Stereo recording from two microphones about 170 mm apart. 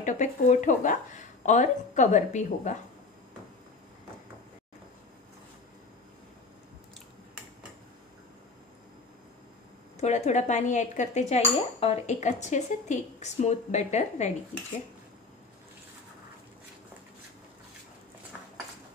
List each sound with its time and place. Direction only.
0.0 s speech: 45° left (ahead or behind)
9.9 s speech: 45° left (ahead or behind)